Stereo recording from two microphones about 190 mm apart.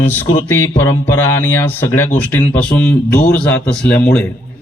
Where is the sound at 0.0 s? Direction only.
10° left (ahead or behind).